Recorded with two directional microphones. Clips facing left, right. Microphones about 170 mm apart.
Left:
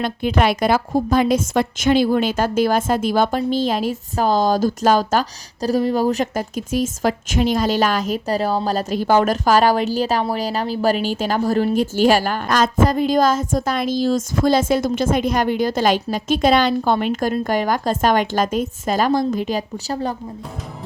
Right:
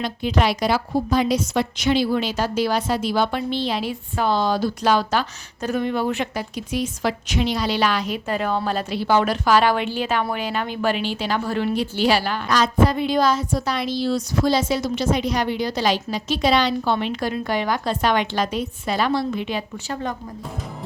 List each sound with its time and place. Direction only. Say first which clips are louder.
0.0 s a woman's voice: left 3 dB; 55° left (ahead or behind); by 20.1 s 35° left (ahead or behind)